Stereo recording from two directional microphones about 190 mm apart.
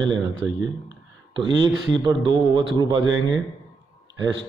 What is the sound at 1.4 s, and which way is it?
A man's voice, 25° right (ahead or behind).